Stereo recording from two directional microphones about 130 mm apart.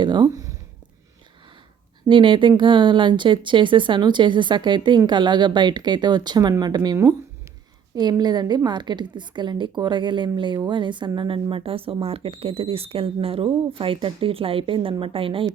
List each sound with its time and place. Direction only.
0.0 s speech: 35° right (ahead or behind)
2.0 s speech: 40° right (ahead or behind)